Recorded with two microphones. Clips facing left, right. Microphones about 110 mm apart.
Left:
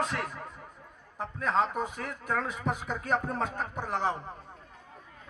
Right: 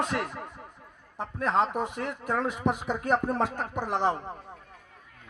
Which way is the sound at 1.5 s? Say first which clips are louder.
Right 2 dB; 60° right (ahead or behind).